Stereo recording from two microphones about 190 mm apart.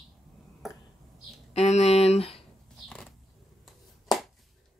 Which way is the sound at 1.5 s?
35° left (ahead or behind).